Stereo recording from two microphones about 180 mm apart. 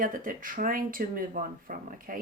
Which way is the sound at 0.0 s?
50° right (ahead or behind).